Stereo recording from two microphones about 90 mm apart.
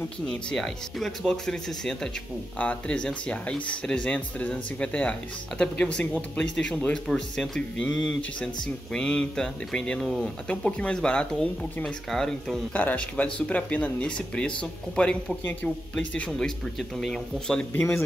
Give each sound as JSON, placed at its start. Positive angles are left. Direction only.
{"t": 0.3, "sound": "speech", "side_deg": 5}
{"t": 12.7, "sound": "speech", "side_deg": 15}
{"t": 17.7, "sound": "speech", "side_deg": 25}